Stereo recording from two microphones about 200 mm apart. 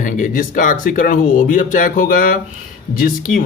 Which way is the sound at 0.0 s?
40° left (ahead or behind).